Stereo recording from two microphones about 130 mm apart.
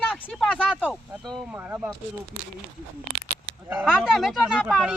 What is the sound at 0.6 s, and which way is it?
Speech, 5° right (ahead or behind).